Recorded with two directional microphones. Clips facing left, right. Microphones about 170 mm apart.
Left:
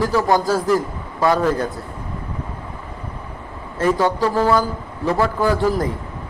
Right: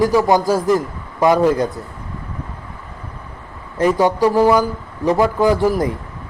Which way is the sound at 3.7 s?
15° right (ahead or behind).